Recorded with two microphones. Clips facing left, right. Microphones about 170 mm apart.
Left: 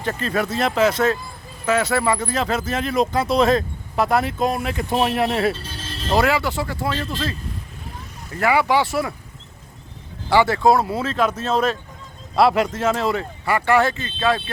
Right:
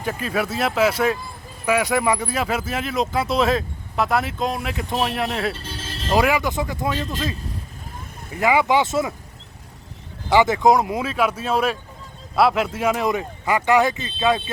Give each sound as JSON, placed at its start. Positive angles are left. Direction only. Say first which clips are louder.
{"t": 0.0, "sound": "speech", "louder": "left 1 dB", "side_deg": -10}
{"t": 6.1, "sound": "speech", "louder": "even", "side_deg": -15}
{"t": 10.2, "sound": "speech", "louder": "even", "side_deg": -20}